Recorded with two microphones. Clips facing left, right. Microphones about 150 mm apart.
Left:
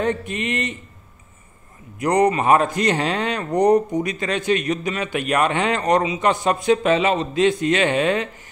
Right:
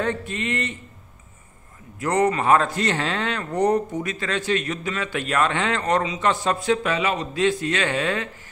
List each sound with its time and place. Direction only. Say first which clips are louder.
0.0 s a man's voice: left 3 dB; 15° left (ahead or behind)
2.0 s speech: left 3 dB; 15° left (ahead or behind)